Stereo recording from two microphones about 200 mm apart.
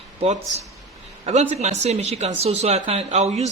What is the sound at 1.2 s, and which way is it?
Speech, 35° right (ahead or behind).